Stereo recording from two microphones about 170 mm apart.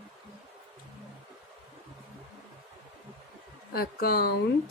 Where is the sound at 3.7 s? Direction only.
60° left (ahead or behind).